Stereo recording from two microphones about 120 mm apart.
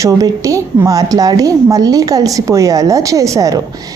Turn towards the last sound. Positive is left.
turn(degrees=-30)  # may be behind; listen again after turning